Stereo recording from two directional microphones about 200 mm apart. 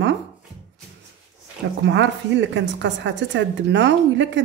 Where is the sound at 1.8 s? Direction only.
65° right (ahead or behind).